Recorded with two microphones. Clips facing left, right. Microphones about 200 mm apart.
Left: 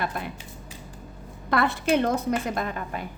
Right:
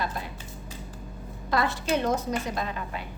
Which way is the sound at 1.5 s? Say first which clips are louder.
Left 3 dB; 60° left (ahead or behind).